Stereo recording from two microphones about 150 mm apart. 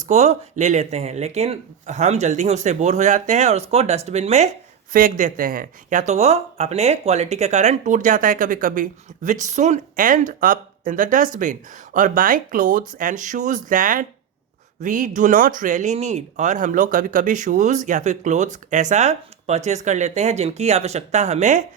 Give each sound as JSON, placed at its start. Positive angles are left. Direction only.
{"t": 0.0, "sound": "speech", "side_deg": -50}
{"t": 4.9, "sound": "speech", "side_deg": -65}